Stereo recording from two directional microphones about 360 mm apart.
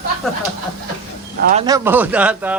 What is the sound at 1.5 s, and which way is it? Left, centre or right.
Speech, centre.